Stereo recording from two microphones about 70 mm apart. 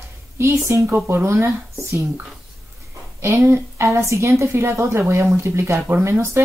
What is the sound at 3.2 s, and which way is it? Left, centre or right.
A woman's voice, right.